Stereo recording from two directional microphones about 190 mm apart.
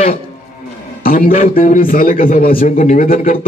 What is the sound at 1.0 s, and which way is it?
A man's voice, 45° left (ahead or behind).